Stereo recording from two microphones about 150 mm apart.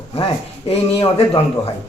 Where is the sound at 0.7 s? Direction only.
40° left (ahead or behind).